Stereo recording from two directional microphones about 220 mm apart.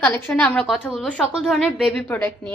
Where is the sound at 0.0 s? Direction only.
5° left (ahead or behind).